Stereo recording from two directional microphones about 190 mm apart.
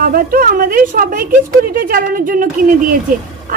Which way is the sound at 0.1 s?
50° right (ahead or behind).